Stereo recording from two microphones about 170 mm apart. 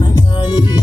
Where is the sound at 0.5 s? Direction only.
25° left (ahead or behind).